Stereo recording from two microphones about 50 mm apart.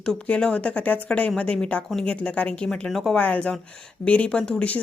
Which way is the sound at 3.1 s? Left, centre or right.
Left.